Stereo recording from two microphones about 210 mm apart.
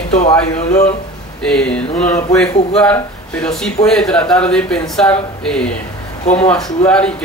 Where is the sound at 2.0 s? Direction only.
35° left (ahead or behind).